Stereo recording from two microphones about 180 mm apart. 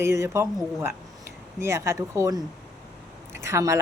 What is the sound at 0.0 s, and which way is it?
Speech, 15° right (ahead or behind).